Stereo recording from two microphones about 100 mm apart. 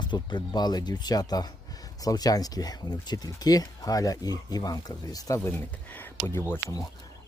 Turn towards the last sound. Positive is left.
turn(degrees=25)  # may be behind; listen again after turning